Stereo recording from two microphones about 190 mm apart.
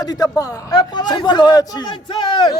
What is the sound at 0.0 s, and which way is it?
A man's voice, 20° left (ahead or behind).